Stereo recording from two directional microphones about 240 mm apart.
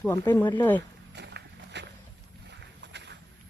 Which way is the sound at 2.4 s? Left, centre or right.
Right.